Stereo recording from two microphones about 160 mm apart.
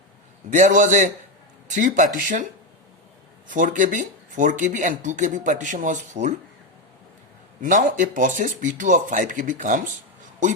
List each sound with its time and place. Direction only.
0.5 s speech: 50° right (ahead or behind)
3.5 s speech: 55° right (ahead or behind)
7.6 s speech: 55° right (ahead or behind)